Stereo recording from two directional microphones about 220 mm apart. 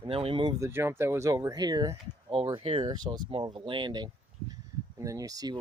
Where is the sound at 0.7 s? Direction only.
10° right (ahead or behind).